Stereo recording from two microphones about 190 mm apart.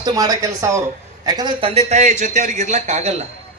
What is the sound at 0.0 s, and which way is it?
Speech, 20° right (ahead or behind).